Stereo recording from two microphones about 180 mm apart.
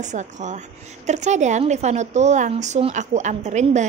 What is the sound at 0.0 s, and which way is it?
A woman's voice, 40° right (ahead or behind).